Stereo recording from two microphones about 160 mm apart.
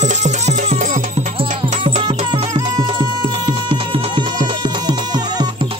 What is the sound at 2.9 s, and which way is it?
Music, 30° right (ahead or behind).